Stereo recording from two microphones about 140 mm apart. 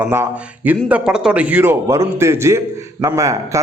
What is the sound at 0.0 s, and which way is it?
A man's voice, 15° right (ahead or behind).